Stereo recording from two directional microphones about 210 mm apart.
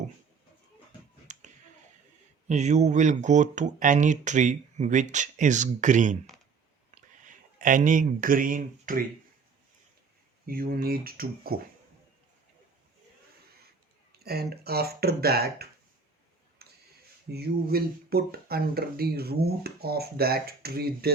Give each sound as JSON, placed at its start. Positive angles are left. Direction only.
{"t": 1.3, "sound": "finger snapping", "side_deg": -35}
{"t": 2.5, "sound": "speech", "side_deg": -35}
{"t": 10.4, "sound": "speech", "side_deg": -45}
{"t": 14.2, "sound": "speech", "side_deg": -50}
{"t": 16.6, "sound": "a sound", "side_deg": -50}
{"t": 17.3, "sound": "speech", "side_deg": -50}